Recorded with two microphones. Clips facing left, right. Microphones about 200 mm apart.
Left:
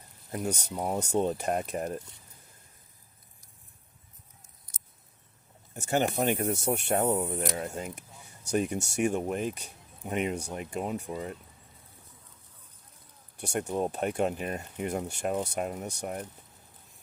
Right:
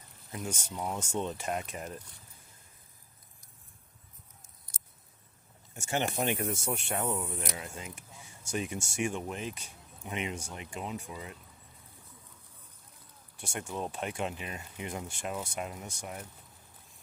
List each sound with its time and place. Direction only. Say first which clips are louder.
0.3 s speech: left 6 dB; 40° left (ahead or behind)
5.7 s speech: left 5 dB; 40° left (ahead or behind)
6.5 s speech: left 6 dB; 60° left (ahead or behind)
6.8 s speech: left 9 dB; 40° left (ahead or behind)
7.9 s a sound: left 1 dB; 65° left (ahead or behind)
8.5 s speech: left 6 dB; 40° left (ahead or behind)
11.1 s speech: left 8 dB; 40° left (ahead or behind)
13.4 s speech: left 7 dB; 40° left (ahead or behind)